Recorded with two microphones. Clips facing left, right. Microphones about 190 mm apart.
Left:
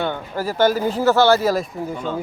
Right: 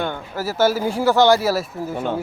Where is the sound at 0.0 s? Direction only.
10° right (ahead or behind).